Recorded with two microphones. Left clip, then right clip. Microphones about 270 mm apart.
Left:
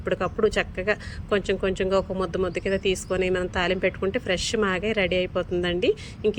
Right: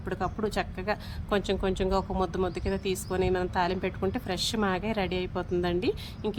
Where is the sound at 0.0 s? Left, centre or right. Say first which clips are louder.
Left 8 dB; centre.